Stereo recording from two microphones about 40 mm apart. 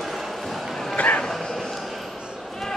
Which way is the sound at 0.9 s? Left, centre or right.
Left.